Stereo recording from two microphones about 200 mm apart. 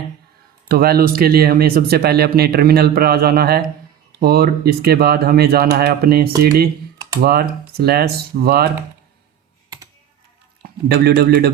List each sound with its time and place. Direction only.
0.7 s speech: 50° right (ahead or behind)
10.6 s a man's voice: 50° right (ahead or behind)